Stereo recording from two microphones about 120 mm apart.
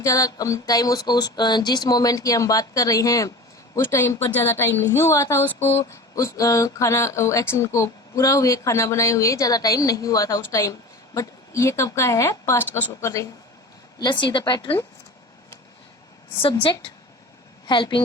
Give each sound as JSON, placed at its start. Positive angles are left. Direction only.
{"t": 0.0, "sound": "a sound", "side_deg": 25}
{"t": 14.0, "sound": "speech", "side_deg": 40}
{"t": 17.7, "sound": "speech", "side_deg": 40}